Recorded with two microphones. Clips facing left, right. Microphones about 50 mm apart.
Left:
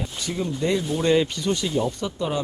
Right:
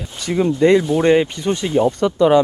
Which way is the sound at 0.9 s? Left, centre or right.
Right.